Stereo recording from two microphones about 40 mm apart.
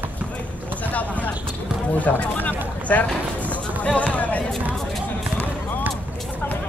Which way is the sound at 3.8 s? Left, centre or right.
Left.